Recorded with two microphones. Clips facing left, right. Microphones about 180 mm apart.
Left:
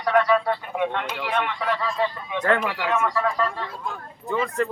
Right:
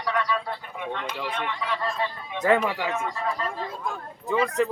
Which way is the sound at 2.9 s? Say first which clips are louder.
Left 5 dB; 75° left (ahead or behind).